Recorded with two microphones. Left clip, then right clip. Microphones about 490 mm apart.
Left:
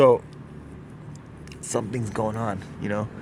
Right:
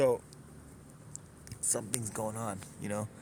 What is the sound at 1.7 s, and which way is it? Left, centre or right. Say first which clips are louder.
Speech: left 9 dB; right.